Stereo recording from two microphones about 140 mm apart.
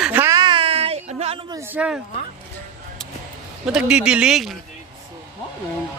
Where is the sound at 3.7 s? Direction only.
5° right (ahead or behind).